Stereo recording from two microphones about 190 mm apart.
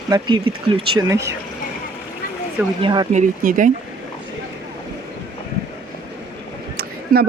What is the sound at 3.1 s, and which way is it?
Speech, 45° right (ahead or behind).